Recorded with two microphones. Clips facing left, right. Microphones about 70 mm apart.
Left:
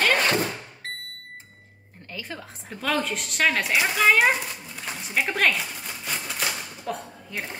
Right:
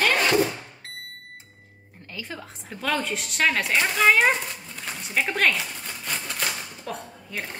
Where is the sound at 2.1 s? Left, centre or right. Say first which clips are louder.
Even; centre.